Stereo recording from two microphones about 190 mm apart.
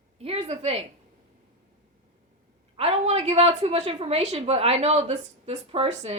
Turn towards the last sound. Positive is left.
turn(degrees=-35)  # may be behind; listen again after turning